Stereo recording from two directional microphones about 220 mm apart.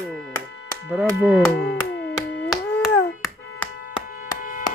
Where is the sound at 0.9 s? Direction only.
5° right (ahead or behind).